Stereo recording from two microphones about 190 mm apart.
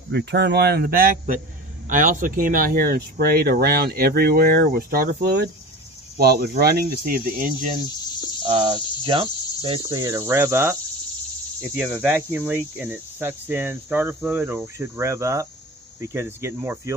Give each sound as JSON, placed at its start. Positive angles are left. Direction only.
{"t": 0.1, "sound": "a man's voice", "side_deg": -65}
{"t": 8.5, "sound": "cricket", "side_deg": -25}
{"t": 9.8, "sound": "cricket", "side_deg": -15}